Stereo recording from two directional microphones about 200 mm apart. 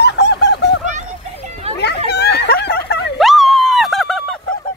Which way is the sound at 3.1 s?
Centre (ahead or behind).